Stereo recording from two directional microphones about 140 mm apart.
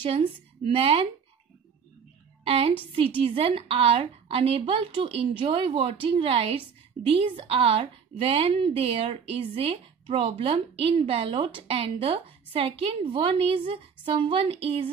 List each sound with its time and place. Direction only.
0.7 s a woman's voice: 45° right (ahead or behind)
2.4 s a woman's voice: 45° right (ahead or behind)